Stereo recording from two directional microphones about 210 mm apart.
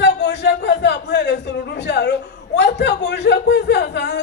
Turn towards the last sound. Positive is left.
turn(degrees=55)  # may be behind; listen again after turning